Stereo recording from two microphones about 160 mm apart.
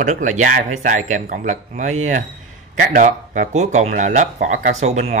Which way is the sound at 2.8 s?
60° right (ahead or behind).